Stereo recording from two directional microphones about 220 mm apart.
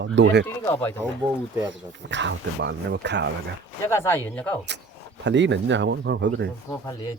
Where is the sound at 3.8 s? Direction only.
10° left (ahead or behind).